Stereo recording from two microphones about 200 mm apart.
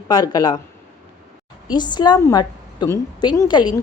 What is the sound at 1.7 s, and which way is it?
A woman's voice, 20° left (ahead or behind).